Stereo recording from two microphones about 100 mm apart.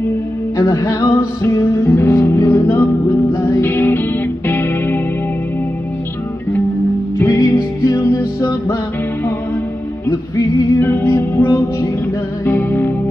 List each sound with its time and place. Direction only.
0.6 s music: 35° left (ahead or behind)
7.2 s music: 25° left (ahead or behind)
10.8 s music: 20° left (ahead or behind)